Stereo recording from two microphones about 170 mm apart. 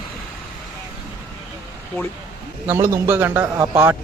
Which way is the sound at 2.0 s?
15° left (ahead or behind).